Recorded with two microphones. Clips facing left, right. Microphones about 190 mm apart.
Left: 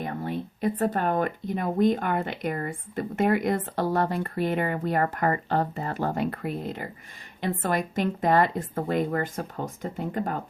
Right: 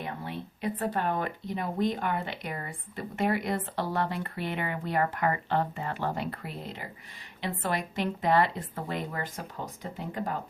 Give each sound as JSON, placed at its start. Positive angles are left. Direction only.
{"t": 0.0, "sound": "speech", "side_deg": 45}